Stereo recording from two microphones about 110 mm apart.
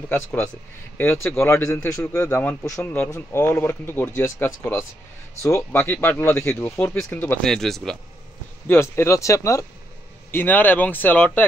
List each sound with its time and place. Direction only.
0.1 s speech: 20° left (ahead or behind)
2.2 s speech: 15° left (ahead or behind)
2.6 s speech: 25° left (ahead or behind)
7.4 s speech: 5° left (ahead or behind)
8.6 s speech: 25° left (ahead or behind)
10.3 s speech: 15° left (ahead or behind)